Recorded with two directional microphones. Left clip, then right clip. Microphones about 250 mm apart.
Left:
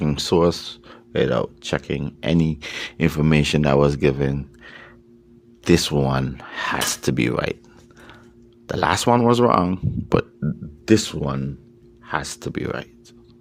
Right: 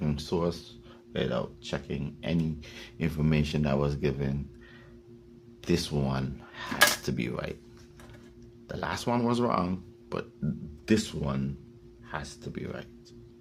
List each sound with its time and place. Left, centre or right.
0.0 s speech: left
8.6 s speech: left
12.0 s speech: left